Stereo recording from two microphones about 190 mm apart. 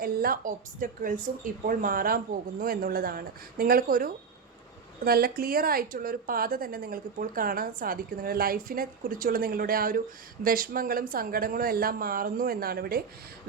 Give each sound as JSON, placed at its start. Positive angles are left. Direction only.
{"t": 0.0, "sound": "speech", "side_deg": -50}